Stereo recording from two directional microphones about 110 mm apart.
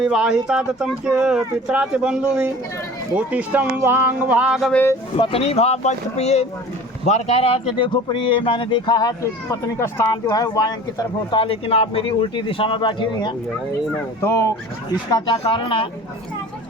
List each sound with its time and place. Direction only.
0.0 s speech: 5° right (ahead or behind)
5.1 s speech: 60° left (ahead or behind)
8.0 s speech: 50° left (ahead or behind)
9.2 s speech: 25° left (ahead or behind)
11.3 s speech: 60° left (ahead or behind)
14.2 s speech: 25° left (ahead or behind)
15.4 s speech: 55° left (ahead or behind)